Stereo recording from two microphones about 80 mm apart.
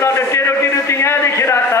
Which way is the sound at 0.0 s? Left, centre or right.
Left.